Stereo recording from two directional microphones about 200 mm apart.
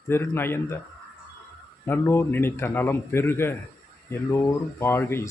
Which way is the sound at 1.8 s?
15° left (ahead or behind).